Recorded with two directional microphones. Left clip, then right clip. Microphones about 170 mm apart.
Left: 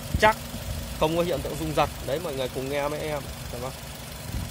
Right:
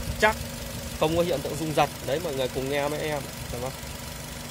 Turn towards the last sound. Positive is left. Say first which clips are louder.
# right 1 dB
turn(degrees=-15)  # may be behind; listen again after turning